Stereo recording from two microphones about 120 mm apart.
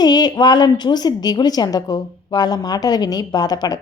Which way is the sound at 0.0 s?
35° left (ahead or behind).